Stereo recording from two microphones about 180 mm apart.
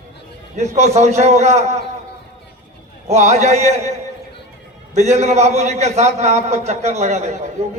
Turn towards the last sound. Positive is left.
turn(degrees=-40)  # may be behind; listen again after turning